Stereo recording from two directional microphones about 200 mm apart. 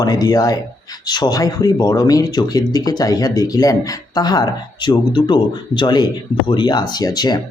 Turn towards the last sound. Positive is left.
turn(degrees=20)  # may be behind; listen again after turning